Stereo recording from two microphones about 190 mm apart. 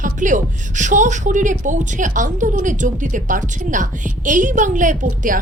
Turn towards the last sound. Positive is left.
turn(degrees=-40)  # may be behind; listen again after turning